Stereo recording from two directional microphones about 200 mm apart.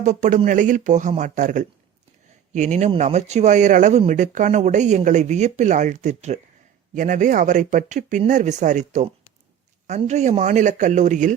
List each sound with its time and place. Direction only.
0.0 s speech: 35° right (ahead or behind)